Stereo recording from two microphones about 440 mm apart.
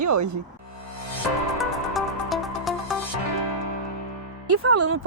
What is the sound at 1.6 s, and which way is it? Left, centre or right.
Music, centre.